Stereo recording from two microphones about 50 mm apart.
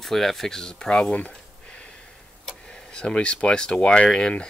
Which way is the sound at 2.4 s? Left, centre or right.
Centre.